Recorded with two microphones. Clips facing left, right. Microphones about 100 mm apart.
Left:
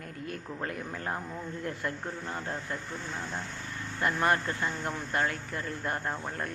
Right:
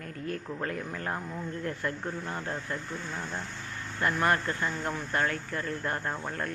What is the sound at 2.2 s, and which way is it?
Speech, 20° right (ahead or behind).